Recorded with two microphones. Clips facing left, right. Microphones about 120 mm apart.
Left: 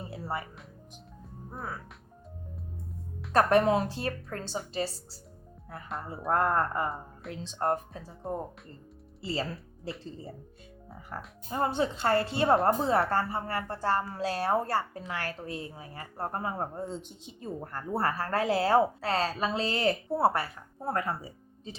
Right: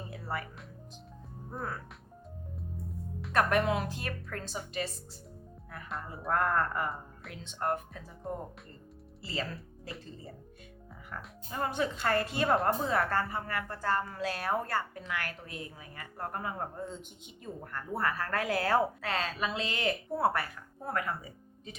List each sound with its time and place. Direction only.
0.1 s music: 25° left (ahead or behind)
1.5 s speech: 5° left (ahead or behind)
3.3 s a woman's voice: 35° left (ahead or behind)
9.2 s speech: 30° left (ahead or behind)
11.1 s a woman's voice: 30° left (ahead or behind)